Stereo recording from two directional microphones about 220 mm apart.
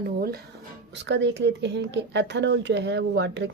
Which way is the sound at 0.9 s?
55° right (ahead or behind).